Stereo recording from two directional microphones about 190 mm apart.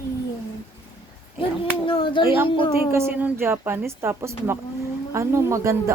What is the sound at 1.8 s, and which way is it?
Child singing, 30° left (ahead or behind).